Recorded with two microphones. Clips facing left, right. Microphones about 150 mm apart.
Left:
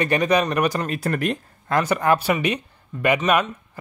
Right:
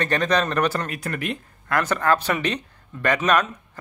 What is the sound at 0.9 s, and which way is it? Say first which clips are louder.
Speech: left 5 dB; 35° left (ahead or behind).